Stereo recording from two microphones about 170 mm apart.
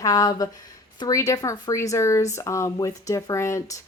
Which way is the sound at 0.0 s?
20° left (ahead or behind).